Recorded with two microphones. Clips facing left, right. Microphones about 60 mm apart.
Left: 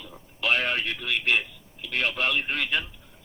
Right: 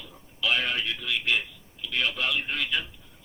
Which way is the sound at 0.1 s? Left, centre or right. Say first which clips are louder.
Left 2 dB; left.